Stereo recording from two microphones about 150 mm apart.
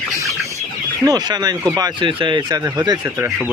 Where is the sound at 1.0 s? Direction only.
25° right (ahead or behind).